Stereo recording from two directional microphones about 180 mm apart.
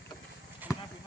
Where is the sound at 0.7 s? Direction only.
20° left (ahead or behind).